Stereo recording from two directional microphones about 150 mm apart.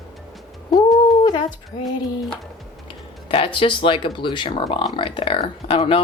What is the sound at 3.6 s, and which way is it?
Speech, 35° left (ahead or behind).